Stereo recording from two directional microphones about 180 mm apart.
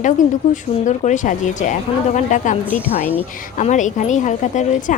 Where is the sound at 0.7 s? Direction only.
40° left (ahead or behind).